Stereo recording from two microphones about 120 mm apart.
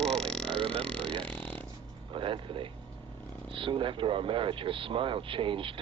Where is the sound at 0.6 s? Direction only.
50° right (ahead or behind).